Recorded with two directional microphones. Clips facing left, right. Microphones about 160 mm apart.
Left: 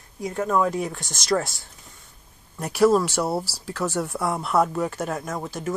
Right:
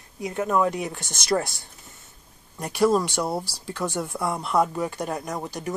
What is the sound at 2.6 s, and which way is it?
Speech, 5° left (ahead or behind).